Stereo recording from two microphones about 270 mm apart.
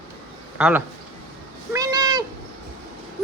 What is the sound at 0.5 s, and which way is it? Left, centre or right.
Speech, centre.